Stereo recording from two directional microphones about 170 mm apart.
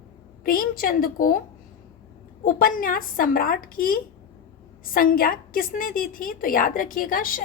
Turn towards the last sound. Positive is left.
turn(degrees=55)  # may be behind; listen again after turning